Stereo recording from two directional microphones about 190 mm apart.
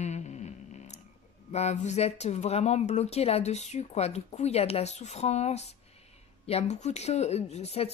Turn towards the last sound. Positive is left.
turn(degrees=35)  # may be behind; listen again after turning